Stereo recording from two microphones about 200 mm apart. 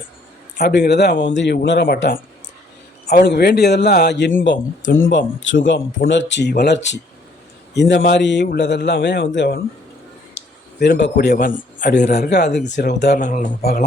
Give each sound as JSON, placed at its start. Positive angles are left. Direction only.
{"t": 0.5, "sound": "a man's voice", "side_deg": 55}
{"t": 3.1, "sound": "a man's voice", "side_deg": 50}
{"t": 5.1, "sound": "a man's voice", "side_deg": 70}
{"t": 10.4, "sound": "a sound", "side_deg": 60}
{"t": 10.8, "sound": "a man's voice", "side_deg": 60}
{"t": 11.8, "sound": "speech", "side_deg": 40}
{"t": 12.3, "sound": "a man's voice", "side_deg": 55}
{"t": 13.1, "sound": "speech", "side_deg": 40}